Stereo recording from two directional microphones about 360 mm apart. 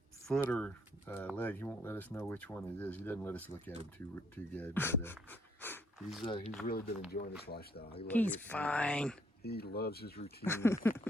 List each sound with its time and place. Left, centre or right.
0.3 s speech: centre
5.1 s pant: centre
6.2 s speech: centre
6.7 s speech: left
8.0 s speech: centre
9.4 s speech: left
10.4 s speech: centre
10.8 s a sound: centre